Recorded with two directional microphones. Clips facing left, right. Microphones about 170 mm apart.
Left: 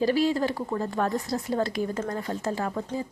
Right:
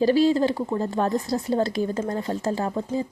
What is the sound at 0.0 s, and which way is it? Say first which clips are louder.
Speech: right 5 dB; 30° right (ahead or behind).